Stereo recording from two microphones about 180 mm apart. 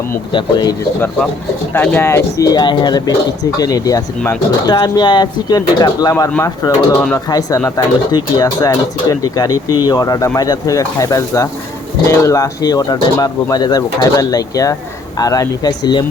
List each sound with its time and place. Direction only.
0.3 s speech: 25° left (ahead or behind)
1.7 s speech: 10° left (ahead or behind)